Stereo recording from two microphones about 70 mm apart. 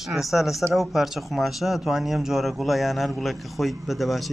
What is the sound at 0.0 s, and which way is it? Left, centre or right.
Speech, centre.